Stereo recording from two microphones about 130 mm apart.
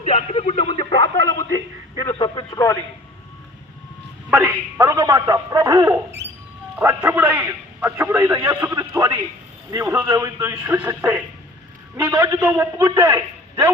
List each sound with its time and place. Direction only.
0.0 s speech: 55° left (ahead or behind)
0.9 s speech: 30° left (ahead or behind)
4.3 s a man's voice: 15° right (ahead or behind)